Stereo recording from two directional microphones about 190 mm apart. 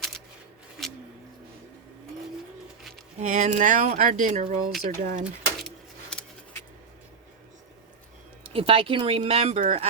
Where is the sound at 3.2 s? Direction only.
40° right (ahead or behind).